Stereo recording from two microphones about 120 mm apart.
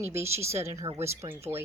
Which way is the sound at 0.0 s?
20° right (ahead or behind).